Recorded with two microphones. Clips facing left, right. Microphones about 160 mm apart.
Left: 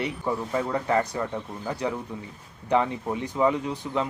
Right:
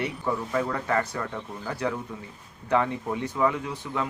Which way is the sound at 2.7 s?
20° left (ahead or behind).